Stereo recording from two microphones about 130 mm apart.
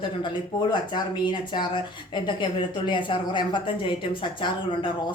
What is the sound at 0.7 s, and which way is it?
Speech, 35° left (ahead or behind).